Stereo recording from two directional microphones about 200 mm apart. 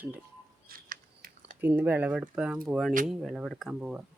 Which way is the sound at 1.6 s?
10° right (ahead or behind).